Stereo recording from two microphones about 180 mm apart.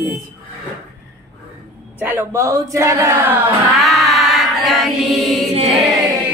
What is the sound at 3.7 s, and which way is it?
Mantra, centre (ahead or behind).